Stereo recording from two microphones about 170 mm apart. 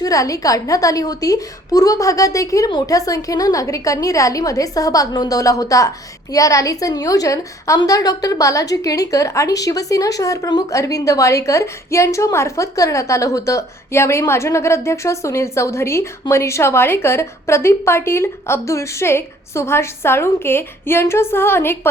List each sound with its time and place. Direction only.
0.0 s a woman's voice: 20° left (ahead or behind)